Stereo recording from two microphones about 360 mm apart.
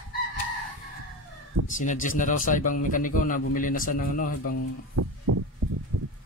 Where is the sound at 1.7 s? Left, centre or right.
Left.